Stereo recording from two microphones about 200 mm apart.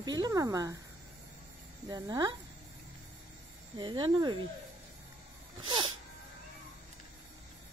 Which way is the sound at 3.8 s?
25° right (ahead or behind).